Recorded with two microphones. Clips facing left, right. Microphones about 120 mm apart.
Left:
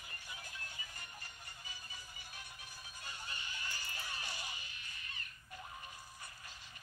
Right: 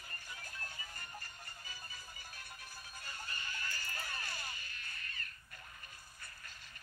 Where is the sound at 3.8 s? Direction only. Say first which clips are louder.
Right 2 dB; 50° right (ahead or behind).